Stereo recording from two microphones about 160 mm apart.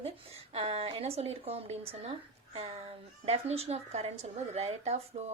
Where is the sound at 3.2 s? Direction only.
40° right (ahead or behind).